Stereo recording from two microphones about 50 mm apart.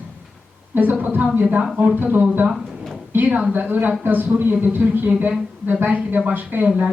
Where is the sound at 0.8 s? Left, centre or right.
Right.